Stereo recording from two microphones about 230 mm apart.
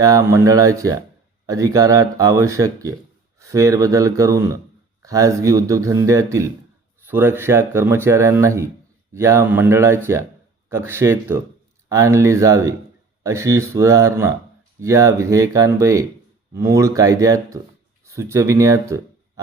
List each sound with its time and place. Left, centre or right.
0.0 s speech: centre